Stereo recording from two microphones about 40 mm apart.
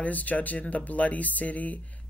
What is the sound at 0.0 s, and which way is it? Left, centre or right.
Speech, left.